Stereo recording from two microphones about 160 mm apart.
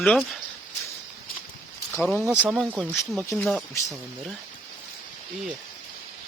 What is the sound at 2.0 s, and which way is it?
Speech, centre (ahead or behind).